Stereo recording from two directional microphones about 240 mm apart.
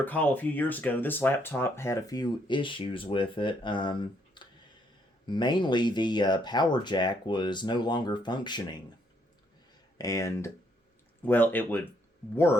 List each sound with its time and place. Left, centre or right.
0.0 s speech: centre
4.4 s clicking: centre
5.2 s speech: centre
10.0 s speech: centre